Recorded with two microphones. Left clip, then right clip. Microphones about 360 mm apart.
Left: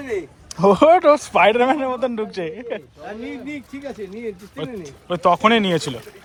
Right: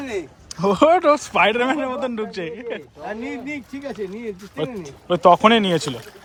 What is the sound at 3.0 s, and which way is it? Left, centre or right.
Speech, right.